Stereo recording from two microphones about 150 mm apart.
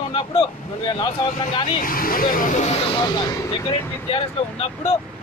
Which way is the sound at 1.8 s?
70° left (ahead or behind).